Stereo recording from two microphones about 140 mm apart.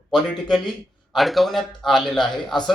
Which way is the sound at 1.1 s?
Centre (ahead or behind).